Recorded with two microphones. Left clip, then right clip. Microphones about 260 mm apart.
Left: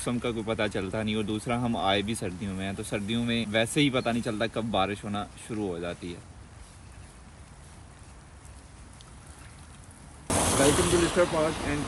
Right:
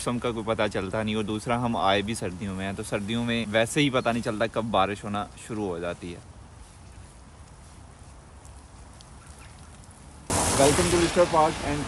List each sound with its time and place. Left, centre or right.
0.0 s speech: centre
10.4 s speech: centre